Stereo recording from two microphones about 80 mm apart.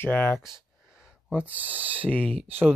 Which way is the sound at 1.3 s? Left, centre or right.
Centre.